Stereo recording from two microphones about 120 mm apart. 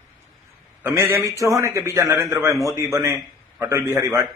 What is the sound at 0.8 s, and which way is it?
A man's voice, 25° right (ahead or behind).